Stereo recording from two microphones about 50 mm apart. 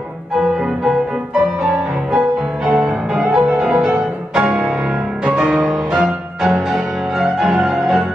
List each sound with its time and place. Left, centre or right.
2.1 s music: centre